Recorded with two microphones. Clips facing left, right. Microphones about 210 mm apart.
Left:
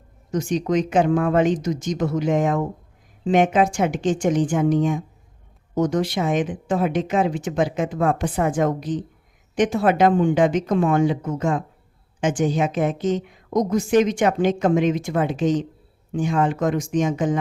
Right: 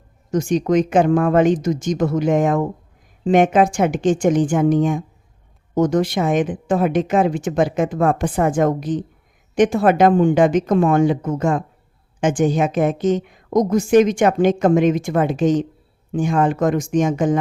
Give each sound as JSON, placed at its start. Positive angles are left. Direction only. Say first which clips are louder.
{"t": 0.3, "sound": "a woman's voice", "louder": "right 4 dB", "side_deg": -50}